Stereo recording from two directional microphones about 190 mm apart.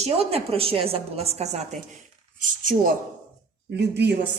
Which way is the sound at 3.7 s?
60° right (ahead or behind).